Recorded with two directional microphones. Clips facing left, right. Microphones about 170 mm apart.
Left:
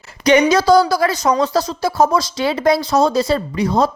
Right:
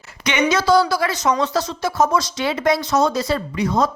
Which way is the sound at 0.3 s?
40° left (ahead or behind).